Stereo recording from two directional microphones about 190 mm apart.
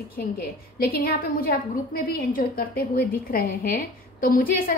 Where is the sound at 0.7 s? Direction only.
50° left (ahead or behind).